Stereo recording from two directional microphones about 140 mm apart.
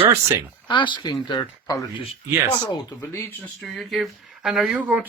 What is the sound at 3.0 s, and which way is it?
Speech, 15° left (ahead or behind).